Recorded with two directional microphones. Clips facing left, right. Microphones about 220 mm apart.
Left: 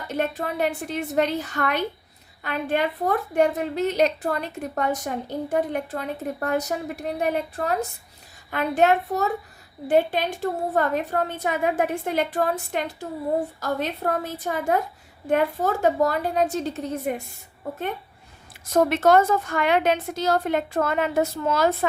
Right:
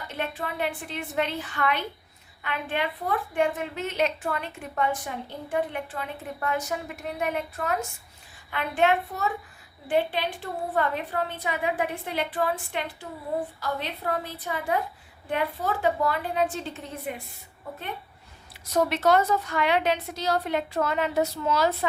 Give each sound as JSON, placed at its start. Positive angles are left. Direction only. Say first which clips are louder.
{"t": 0.1, "sound": "a woman's voice", "louder": "left 7 dB", "side_deg": 40}
{"t": 18.6, "sound": "a woman's voice", "louder": "left 4 dB", "side_deg": 50}